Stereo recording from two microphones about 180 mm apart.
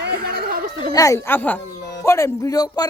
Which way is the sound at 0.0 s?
60° right (ahead or behind).